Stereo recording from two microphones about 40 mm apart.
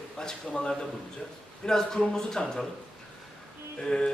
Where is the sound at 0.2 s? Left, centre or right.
Centre.